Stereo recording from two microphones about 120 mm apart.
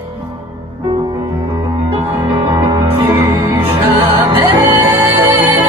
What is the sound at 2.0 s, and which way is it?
Music, 15° right (ahead or behind).